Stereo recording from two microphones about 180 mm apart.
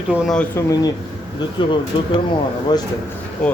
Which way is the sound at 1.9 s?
25° left (ahead or behind).